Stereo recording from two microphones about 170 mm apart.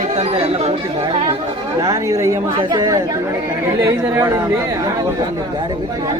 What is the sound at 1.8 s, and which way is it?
Speech, 20° right (ahead or behind).